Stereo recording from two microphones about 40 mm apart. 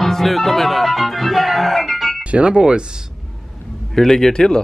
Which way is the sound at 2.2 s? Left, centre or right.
Right.